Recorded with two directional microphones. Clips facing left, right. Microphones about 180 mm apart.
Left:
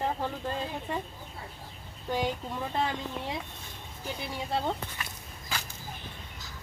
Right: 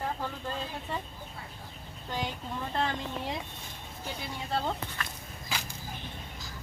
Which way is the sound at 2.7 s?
5° left (ahead or behind).